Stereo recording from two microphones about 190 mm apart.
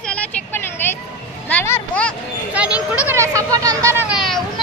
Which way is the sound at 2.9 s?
10° right (ahead or behind).